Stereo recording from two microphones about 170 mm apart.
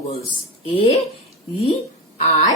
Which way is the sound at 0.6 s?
30° left (ahead or behind).